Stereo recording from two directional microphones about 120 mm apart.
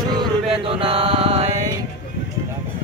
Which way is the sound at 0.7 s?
50° right (ahead or behind).